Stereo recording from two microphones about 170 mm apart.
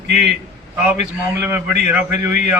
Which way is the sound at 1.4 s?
15° right (ahead or behind).